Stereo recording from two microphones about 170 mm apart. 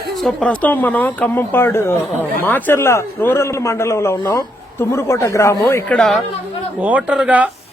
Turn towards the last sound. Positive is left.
turn(degrees=-5)  # may be behind; listen again after turning